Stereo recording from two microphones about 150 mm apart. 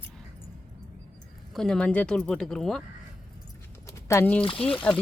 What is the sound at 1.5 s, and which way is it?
Speech, 5° left (ahead or behind).